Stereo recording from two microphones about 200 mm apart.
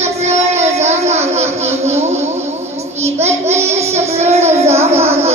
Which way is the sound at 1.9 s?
35° right (ahead or behind).